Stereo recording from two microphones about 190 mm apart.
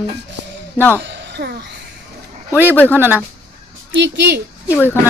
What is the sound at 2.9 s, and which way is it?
Speech, 10° right (ahead or behind).